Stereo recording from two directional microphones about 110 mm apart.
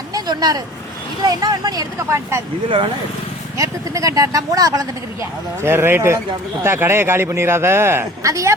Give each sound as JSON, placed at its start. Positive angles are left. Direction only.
{"t": 0.1, "sound": "a sound", "side_deg": -40}
{"t": 1.3, "sound": "speech", "side_deg": -35}
{"t": 3.6, "sound": "speech", "side_deg": -30}
{"t": 5.6, "sound": "a man's voice", "side_deg": -20}